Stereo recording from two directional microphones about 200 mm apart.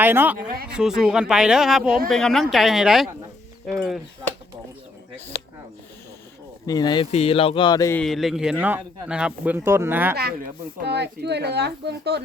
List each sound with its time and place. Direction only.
0.0 s speech: 10° right (ahead or behind)
6.7 s speech: 20° left (ahead or behind)
8.0 s speech: centre (ahead or behind)
10.8 s speech: 60° right (ahead or behind)